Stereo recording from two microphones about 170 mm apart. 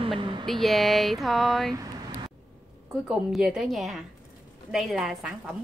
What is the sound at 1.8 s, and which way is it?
Vehicle, 25° right (ahead or behind).